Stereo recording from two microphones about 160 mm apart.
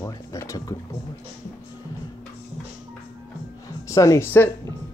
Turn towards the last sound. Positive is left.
turn(degrees=15)  # may be behind; listen again after turning